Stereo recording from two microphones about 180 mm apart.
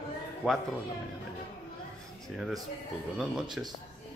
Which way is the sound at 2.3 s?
Centre (ahead or behind).